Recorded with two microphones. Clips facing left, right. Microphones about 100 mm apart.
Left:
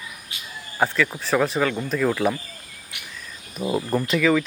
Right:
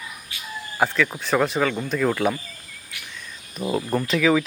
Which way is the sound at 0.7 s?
Centre (ahead or behind).